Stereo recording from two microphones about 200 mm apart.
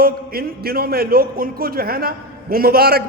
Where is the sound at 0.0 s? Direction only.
50° right (ahead or behind).